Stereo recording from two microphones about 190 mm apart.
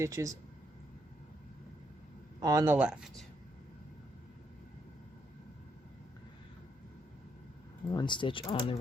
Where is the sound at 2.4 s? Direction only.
15° right (ahead or behind).